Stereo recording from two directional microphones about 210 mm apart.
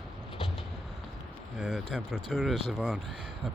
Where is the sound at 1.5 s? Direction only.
5° right (ahead or behind).